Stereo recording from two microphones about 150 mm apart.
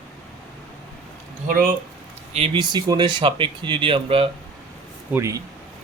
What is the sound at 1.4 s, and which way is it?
Speech, 70° right (ahead or behind).